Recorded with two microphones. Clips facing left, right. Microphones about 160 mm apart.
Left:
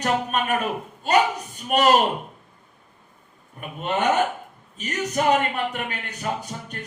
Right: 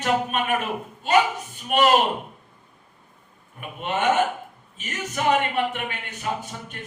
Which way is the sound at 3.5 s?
40° left (ahead or behind).